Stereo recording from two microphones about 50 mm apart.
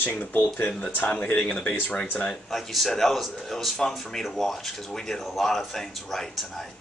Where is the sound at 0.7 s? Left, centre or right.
Centre.